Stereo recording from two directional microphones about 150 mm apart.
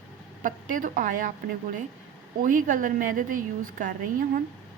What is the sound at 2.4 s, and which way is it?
A woman's voice, 65° right (ahead or behind).